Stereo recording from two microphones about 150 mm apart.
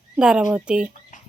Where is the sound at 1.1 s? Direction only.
60° left (ahead or behind).